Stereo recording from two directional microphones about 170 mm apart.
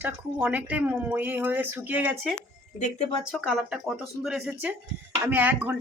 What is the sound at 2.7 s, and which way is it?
Speech, 45° left (ahead or behind).